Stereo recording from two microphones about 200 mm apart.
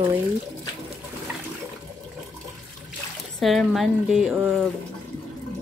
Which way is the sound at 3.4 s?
Centre (ahead or behind).